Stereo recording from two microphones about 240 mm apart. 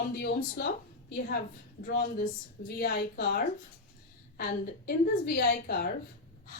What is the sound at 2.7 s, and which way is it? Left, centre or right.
A woman's voice, left.